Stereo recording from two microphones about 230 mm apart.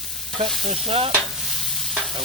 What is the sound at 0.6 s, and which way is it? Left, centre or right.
Speech, right.